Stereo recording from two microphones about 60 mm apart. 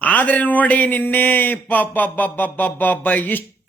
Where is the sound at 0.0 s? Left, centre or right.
Left.